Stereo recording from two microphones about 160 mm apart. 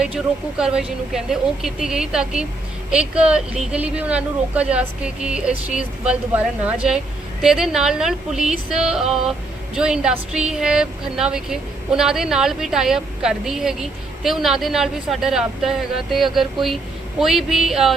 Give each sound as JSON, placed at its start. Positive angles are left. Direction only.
{"t": 0.0, "sound": "a woman's voice", "side_deg": -5}